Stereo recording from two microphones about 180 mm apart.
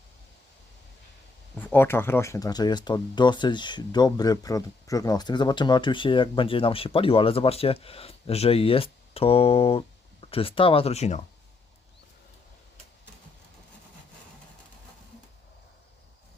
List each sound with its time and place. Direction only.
1.5 s speech: 10° left (ahead or behind); by 11.3 s 40° left (ahead or behind)